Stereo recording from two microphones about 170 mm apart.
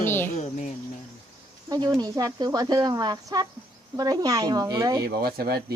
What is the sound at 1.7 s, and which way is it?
Speech, 25° right (ahead or behind).